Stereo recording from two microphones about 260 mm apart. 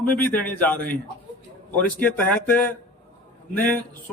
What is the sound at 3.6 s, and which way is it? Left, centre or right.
Speech, centre.